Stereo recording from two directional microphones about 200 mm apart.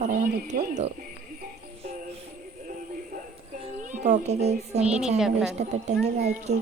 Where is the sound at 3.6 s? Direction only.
35° right (ahead or behind).